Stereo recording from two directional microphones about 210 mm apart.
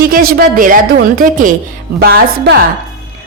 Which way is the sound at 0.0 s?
45° right (ahead or behind).